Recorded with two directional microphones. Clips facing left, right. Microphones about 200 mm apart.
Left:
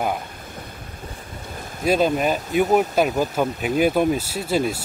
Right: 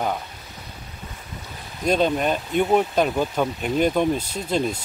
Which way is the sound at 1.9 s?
5° left (ahead or behind).